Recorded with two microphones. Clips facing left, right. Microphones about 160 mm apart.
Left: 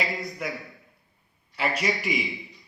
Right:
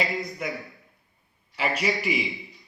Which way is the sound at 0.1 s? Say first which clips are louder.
Right 1 dB; centre (ahead or behind).